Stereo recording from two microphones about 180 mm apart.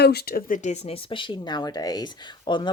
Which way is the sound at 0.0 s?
65° left (ahead or behind).